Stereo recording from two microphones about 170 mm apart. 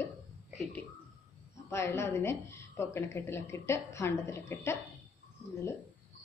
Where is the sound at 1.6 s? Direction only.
15° left (ahead or behind).